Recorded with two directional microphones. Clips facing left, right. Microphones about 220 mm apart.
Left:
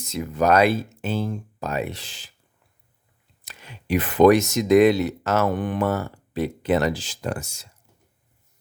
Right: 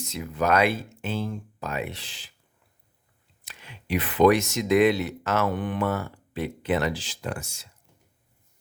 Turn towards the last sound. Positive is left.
turn(degrees=40)  # may be behind; listen again after turning